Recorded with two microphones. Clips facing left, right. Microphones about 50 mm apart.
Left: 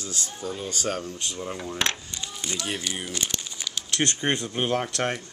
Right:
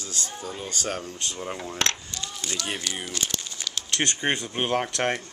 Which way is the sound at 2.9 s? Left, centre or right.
Centre.